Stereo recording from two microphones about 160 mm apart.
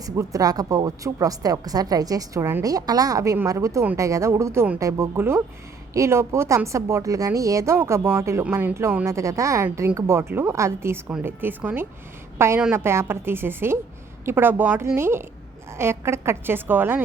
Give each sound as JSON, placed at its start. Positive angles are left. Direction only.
{"t": 0.0, "sound": "a woman's voice", "side_deg": -20}